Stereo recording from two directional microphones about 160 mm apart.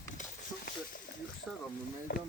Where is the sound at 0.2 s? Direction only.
60° left (ahead or behind).